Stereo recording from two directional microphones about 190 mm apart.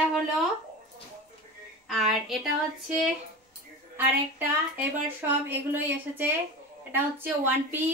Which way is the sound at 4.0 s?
10° right (ahead or behind).